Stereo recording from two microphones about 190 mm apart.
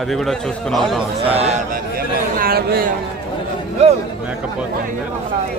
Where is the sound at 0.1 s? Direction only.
Centre (ahead or behind).